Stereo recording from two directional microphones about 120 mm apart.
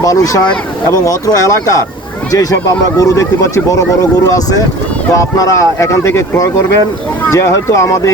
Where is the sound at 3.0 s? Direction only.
25° left (ahead or behind).